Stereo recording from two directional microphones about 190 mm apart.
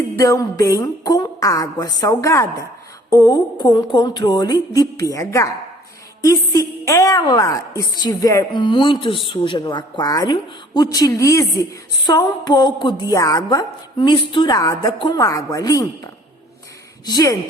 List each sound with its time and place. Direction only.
0.2 s a woman's voice: 15° left (ahead or behind)
17.1 s a woman's voice: 20° left (ahead or behind)